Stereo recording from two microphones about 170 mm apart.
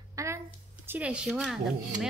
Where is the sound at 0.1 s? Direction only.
15° right (ahead or behind).